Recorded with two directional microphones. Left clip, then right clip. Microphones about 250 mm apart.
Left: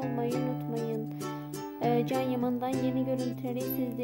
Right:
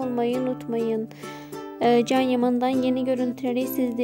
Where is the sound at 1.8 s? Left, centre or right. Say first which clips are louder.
Right 9 dB; right.